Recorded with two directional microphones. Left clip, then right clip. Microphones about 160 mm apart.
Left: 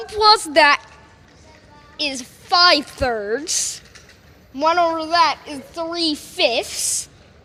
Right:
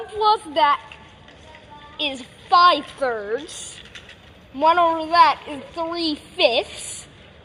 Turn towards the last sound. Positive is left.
turn(degrees=15)  # may be behind; listen again after turning